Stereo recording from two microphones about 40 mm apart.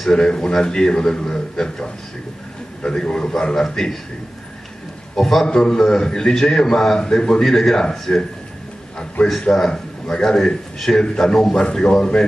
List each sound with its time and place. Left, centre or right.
0.0 s a man's voice: centre
5.1 s a man's voice: centre
9.5 s a man's voice: centre